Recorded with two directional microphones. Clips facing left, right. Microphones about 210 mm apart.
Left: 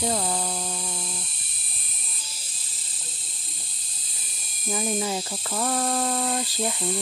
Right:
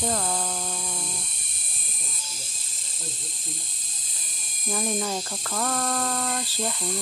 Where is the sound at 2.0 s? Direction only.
45° right (ahead or behind).